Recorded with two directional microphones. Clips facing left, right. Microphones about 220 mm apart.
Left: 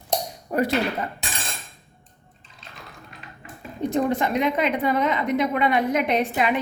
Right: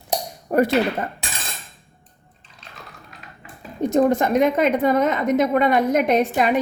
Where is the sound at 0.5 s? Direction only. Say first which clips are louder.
Right 5 dB; 50° right (ahead or behind).